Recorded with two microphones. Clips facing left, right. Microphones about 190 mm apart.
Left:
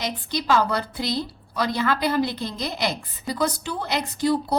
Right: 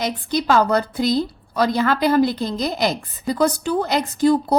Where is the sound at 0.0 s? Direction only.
50° right (ahead or behind).